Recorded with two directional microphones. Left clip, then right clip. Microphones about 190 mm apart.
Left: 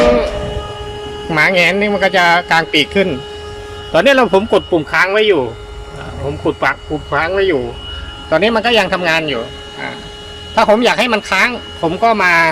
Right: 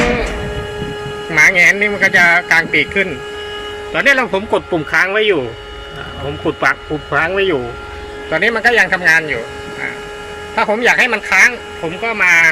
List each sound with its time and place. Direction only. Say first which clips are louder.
1.3 s a man's voice: right 2 dB; 10° left (ahead or behind); by 7.6 s 5° right (ahead or behind)
8.3 s a man's voice: left 1 dB; 10° left (ahead or behind)
10.5 s a man's voice: left 2 dB; 15° left (ahead or behind)